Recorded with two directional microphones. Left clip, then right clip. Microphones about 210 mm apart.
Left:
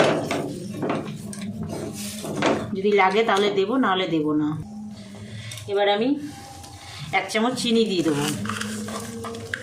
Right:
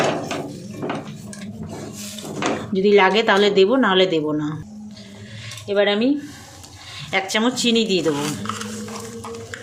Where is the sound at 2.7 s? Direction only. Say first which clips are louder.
Right 5 dB; 50° right (ahead or behind).